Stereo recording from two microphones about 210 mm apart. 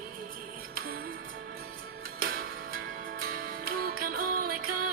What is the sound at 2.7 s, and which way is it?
Music, 45° right (ahead or behind).